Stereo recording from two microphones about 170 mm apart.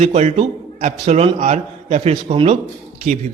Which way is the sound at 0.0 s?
40° right (ahead or behind).